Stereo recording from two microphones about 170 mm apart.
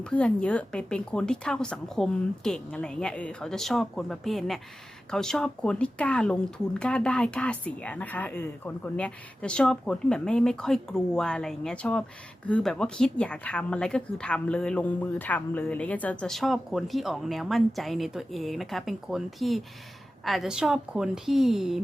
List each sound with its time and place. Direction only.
0.0 s speech: 5° left (ahead or behind)